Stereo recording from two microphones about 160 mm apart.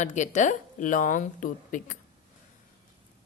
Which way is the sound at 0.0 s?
50° left (ahead or behind).